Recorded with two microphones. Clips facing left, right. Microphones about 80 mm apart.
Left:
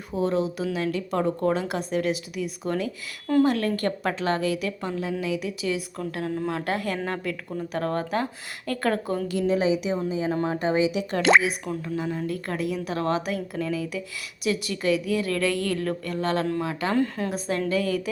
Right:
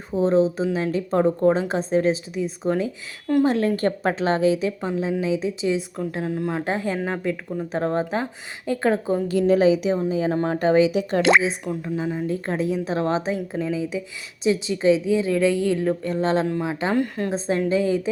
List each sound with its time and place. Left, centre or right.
0.2 s a woman's voice: right
9.3 s a woman's voice: right
11.8 s speech: centre
12.3 s a woman's voice: right
16.9 s a woman's voice: centre
17.3 s a woman's voice: right